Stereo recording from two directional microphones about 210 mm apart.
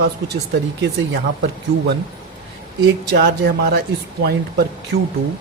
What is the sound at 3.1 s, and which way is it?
Speech, 50° right (ahead or behind).